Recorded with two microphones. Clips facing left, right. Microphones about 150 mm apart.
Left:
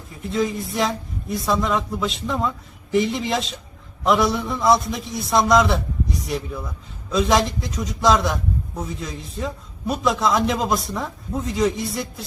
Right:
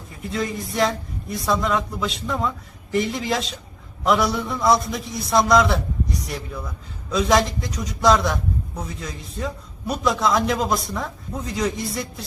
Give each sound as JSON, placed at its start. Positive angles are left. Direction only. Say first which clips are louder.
{"t": 0.1, "sound": "a man's voice", "louder": "left 3 dB", "side_deg": 0}